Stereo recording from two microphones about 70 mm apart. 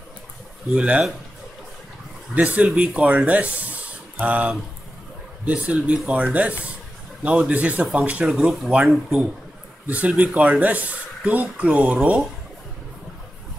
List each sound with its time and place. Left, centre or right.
0.7 s speech: centre
2.3 s speech: centre
8.3 s speech: centre
9.8 s speech: right